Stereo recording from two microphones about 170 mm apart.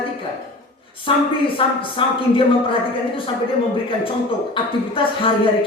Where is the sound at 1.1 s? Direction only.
30° left (ahead or behind).